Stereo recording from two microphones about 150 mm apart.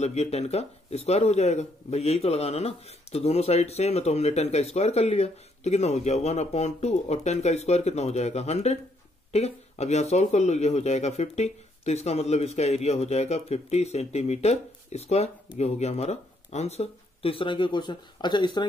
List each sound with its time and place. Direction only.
0.0 s speech: 45° left (ahead or behind); by 18.7 s 30° left (ahead or behind)